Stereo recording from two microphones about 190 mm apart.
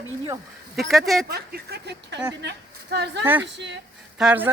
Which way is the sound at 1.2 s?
55° right (ahead or behind).